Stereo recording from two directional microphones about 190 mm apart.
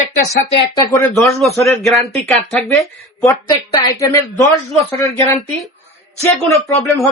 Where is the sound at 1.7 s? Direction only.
Centre (ahead or behind).